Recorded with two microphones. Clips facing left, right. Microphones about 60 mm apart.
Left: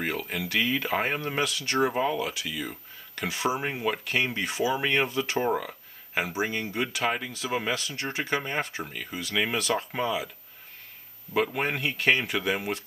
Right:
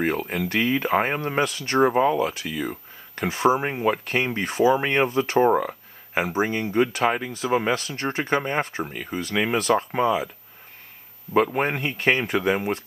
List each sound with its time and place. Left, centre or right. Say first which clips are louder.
0.0 s speech: right 6 dB; right
4.8 s speech: right 4 dB; right
5.4 s a sound: right 11 dB; right
6.6 s speech: right 8 dB; right
7.1 s speech: right 6 dB; centre; by 8.2 s right
8.2 s speech: right 5 dB; right
11.4 s speech: right 4 dB; right